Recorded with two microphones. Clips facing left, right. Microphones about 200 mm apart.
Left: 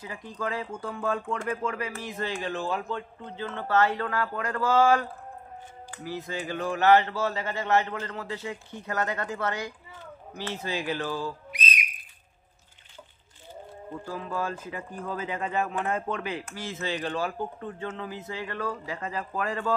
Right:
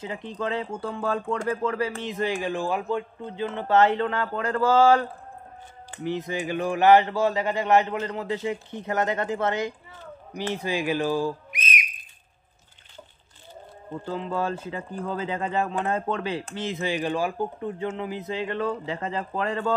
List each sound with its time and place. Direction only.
0.0 s a man's voice: 25° right (ahead or behind)
2.0 s a man's voice: 15° right (ahead or behind)
11.5 s whistle: 20° right (ahead or behind)
14.0 s speech: 25° right (ahead or behind)
16.6 s a man's voice: 15° right (ahead or behind)